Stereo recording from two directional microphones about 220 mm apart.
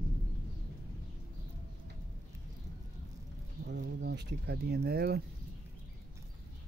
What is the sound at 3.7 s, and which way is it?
Speech, 50° right (ahead or behind).